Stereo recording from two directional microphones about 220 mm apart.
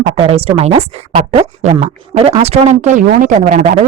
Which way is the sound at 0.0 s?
25° right (ahead or behind).